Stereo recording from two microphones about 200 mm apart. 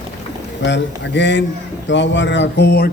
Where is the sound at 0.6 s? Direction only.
60° left (ahead or behind).